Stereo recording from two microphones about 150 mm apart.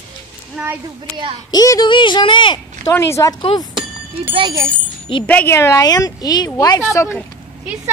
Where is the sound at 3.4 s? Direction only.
30° left (ahead or behind).